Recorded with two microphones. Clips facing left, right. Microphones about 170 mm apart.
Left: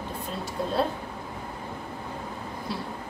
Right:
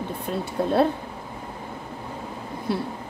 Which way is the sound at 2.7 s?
60° right (ahead or behind).